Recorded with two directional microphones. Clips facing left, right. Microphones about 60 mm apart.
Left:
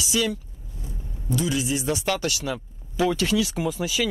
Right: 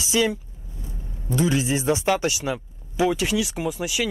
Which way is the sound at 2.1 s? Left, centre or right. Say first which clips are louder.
Right 3 dB; centre.